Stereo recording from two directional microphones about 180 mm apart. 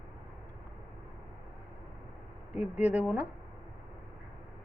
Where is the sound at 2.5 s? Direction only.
10° right (ahead or behind).